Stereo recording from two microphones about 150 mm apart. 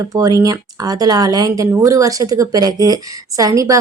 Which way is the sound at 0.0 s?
25° right (ahead or behind).